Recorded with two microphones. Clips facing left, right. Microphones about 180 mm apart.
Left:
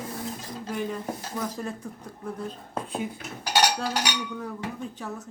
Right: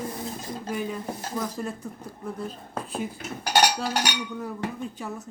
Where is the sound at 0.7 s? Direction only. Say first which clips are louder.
Even; 5° right (ahead or behind).